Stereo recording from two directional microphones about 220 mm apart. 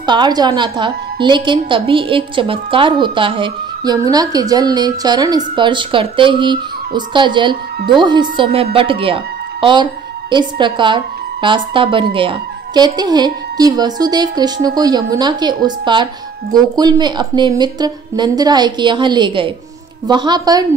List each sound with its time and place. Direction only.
0.0 s a woman's voice: 20° right (ahead or behind)